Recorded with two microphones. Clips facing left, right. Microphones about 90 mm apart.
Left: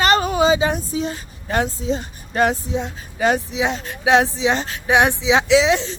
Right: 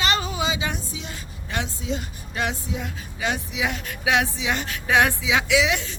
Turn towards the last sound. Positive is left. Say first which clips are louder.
# left 6 dB
turn(degrees=30)  # may be behind; listen again after turning